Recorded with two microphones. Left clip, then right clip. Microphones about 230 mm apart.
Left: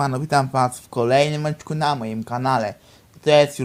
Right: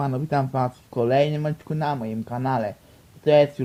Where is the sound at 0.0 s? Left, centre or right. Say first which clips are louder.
Left 5 dB; left.